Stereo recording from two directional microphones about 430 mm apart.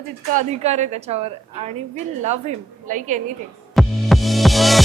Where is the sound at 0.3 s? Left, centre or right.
Centre.